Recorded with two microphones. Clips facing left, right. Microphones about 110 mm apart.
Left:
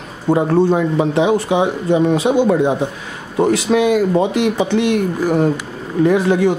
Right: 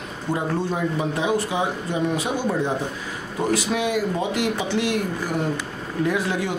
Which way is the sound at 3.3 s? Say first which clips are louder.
Left 9 dB; 75° left (ahead or behind).